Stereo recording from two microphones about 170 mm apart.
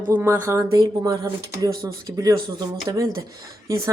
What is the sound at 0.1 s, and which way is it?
Speech, 15° right (ahead or behind).